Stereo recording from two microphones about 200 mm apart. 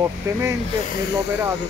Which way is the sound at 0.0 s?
15° right (ahead or behind).